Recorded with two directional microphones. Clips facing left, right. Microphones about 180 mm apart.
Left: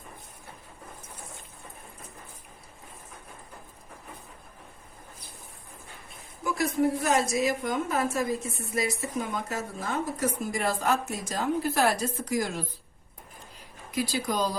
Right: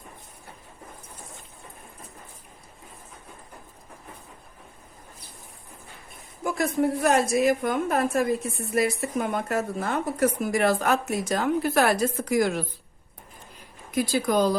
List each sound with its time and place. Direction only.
6.4 s a woman's voice: 55° right (ahead or behind)
13.9 s speech: 50° right (ahead or behind)